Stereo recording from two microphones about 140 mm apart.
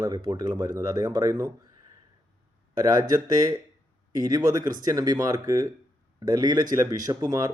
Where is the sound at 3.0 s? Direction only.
25° right (ahead or behind).